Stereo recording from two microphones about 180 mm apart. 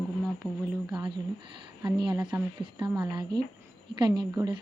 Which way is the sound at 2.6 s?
25° right (ahead or behind).